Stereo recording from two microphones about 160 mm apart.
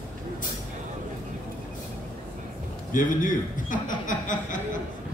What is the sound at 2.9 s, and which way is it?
A man's voice, 55° left (ahead or behind).